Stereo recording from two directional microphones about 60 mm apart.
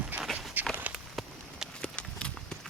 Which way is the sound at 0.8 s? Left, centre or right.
Right.